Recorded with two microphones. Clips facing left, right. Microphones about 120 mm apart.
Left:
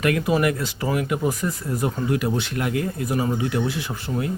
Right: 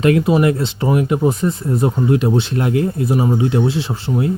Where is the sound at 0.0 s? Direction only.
25° right (ahead or behind).